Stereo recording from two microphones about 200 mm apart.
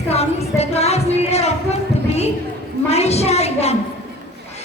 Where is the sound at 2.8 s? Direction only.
30° left (ahead or behind).